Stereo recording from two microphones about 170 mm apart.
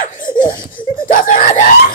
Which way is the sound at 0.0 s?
55° left (ahead or behind).